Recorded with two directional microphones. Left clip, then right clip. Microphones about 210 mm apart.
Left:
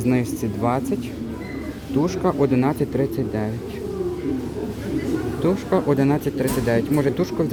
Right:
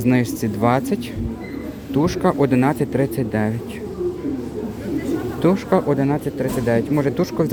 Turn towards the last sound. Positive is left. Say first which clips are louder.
# right 1 dB
turn(degrees=-5)  # may be behind; listen again after turning